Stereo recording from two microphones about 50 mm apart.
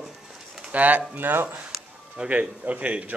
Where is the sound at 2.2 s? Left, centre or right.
Right.